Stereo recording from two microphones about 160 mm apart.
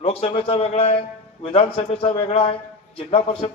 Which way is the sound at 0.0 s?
35° left (ahead or behind).